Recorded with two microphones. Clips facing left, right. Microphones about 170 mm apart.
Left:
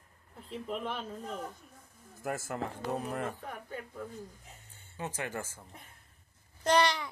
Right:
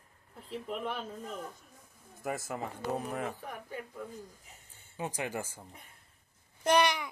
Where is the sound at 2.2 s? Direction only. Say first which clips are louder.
Left 1 dB; centre (ahead or behind).